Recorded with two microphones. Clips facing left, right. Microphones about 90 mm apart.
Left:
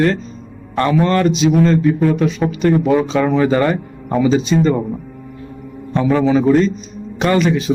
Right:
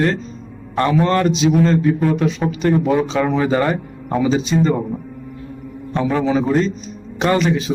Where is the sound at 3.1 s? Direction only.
10° right (ahead or behind).